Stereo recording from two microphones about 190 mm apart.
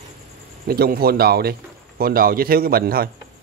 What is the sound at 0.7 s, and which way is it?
A man's voice, 55° right (ahead or behind).